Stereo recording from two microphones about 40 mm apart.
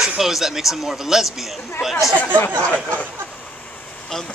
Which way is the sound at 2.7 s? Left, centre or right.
Left.